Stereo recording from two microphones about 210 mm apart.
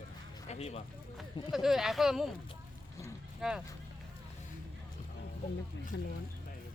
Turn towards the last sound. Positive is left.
turn(degrees=60)  # may be behind; listen again after turning